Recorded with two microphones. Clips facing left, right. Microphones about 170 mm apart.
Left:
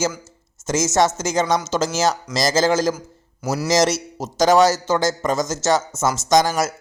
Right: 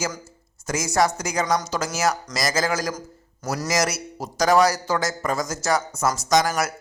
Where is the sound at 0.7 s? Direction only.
25° left (ahead or behind).